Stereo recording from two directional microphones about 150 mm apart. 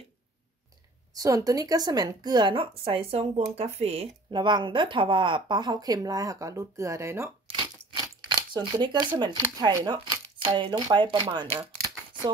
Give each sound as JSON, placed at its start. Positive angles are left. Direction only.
{"t": 1.1, "sound": "speech", "side_deg": -25}
{"t": 7.4, "sound": "speech", "side_deg": -30}